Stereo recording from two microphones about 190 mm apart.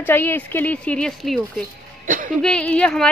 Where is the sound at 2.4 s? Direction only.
5° left (ahead or behind).